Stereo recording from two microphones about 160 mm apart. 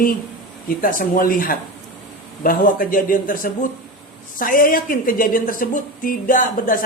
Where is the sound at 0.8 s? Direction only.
60° left (ahead or behind).